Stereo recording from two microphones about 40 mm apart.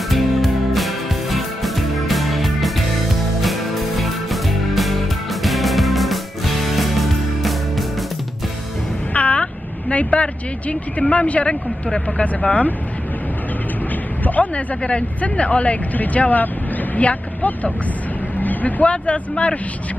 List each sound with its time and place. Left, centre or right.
0.1 s music: centre
9.1 s a sound: left
11.4 s speech: left
14.2 s a sound: left
14.8 s speech: left
18.4 s vehicle: left
18.9 s speech: left